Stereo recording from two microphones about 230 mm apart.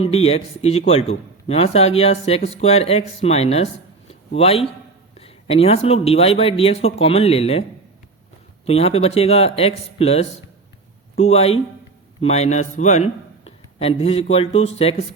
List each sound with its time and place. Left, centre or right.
0.0 s speech: left
8.6 s a man's voice: left